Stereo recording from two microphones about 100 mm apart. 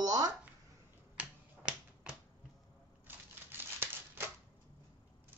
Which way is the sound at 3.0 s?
20° right (ahead or behind).